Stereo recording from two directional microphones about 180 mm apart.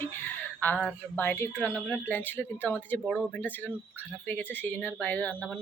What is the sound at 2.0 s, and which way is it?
A woman's voice, 10° left (ahead or behind).